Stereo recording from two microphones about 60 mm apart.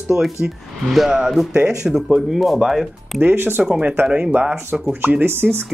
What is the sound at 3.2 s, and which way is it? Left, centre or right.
Speech, right.